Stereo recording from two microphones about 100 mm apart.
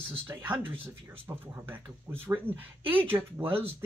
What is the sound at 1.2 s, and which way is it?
Speech, 20° right (ahead or behind).